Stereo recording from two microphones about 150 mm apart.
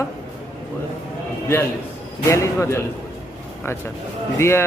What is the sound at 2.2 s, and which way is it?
Speech, 20° left (ahead or behind).